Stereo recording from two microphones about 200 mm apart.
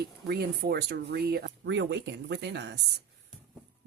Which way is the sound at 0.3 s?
50° right (ahead or behind).